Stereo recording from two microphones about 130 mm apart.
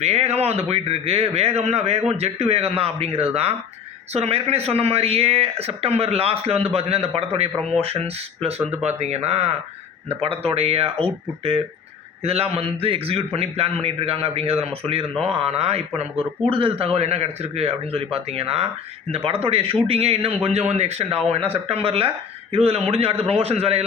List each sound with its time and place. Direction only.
0.0 s a man's voice: 55° right (ahead or behind)